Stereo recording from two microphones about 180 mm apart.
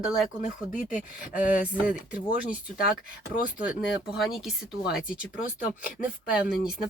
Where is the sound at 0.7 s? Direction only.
45° left (ahead or behind).